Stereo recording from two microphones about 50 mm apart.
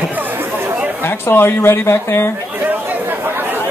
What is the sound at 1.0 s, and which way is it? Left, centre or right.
Speech, left.